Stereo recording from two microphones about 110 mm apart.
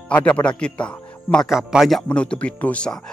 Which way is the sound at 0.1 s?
15° left (ahead or behind).